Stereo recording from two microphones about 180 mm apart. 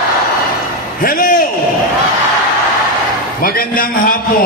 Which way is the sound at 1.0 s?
50° left (ahead or behind).